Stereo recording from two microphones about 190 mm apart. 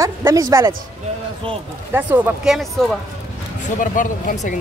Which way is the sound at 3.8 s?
45° left (ahead or behind).